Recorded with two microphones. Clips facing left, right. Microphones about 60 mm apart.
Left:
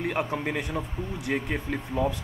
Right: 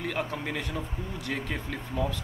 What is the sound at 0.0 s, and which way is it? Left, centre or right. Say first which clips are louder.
Speech: left 4 dB; left.